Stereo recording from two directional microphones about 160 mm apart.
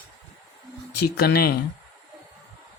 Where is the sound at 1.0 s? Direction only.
75° left (ahead or behind).